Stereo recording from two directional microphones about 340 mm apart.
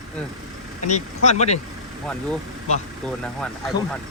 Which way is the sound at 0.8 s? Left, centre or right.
Centre.